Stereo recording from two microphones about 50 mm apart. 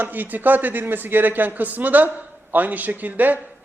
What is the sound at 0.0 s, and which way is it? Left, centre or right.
A man's voice, right.